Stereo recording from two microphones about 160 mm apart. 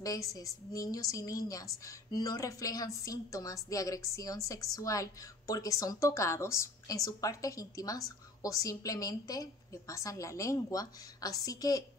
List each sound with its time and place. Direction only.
0.0 s a woman's voice: 20° left (ahead or behind)